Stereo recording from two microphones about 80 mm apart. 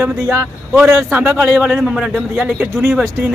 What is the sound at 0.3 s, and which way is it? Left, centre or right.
Speech, right.